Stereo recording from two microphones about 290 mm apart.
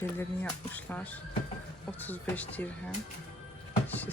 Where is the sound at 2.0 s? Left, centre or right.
Centre.